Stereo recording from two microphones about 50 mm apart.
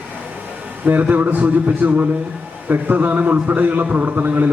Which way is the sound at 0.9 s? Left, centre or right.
Right.